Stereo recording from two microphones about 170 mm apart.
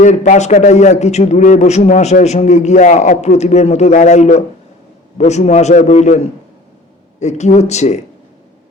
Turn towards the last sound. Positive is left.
turn(degrees=40)  # may be behind; listen again after turning